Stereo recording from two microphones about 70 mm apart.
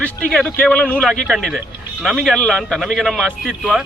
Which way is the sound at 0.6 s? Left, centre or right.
Centre.